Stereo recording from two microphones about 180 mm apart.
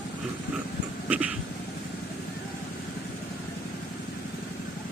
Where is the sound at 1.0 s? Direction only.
5° right (ahead or behind).